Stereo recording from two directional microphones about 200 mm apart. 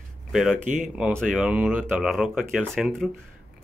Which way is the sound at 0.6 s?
40° right (ahead or behind).